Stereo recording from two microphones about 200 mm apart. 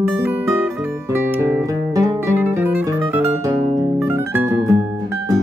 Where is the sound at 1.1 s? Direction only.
10° right (ahead or behind).